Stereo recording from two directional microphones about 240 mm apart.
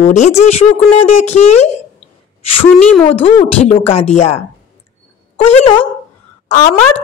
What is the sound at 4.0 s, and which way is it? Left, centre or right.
Speech, left.